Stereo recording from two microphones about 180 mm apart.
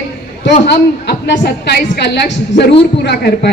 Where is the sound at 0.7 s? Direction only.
70° left (ahead or behind).